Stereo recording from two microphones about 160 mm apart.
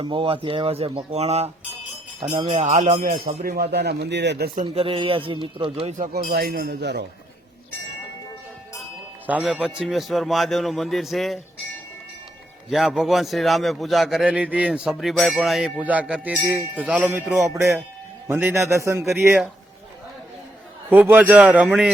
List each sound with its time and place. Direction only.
0.0 s speech: 30° right (ahead or behind)
2.3 s music: 40° right (ahead or behind)
3.4 s speech: 80° right
4.7 s speech: 35° right (ahead or behind)
6.0 s speech: 65° right (ahead or behind); by 7.0 s 90° right
9.2 s a man's voice: 5° right (ahead or behind)
12.7 s a man's voice: centre (ahead or behind)
18.3 s speech: 10° right (ahead or behind)
20.9 s speech: 10° right (ahead or behind)